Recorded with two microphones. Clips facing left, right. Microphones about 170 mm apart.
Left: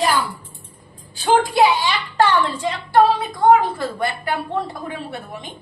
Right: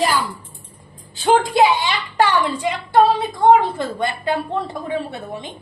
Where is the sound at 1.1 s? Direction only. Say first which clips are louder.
Right 1 dB; 20° right (ahead or behind).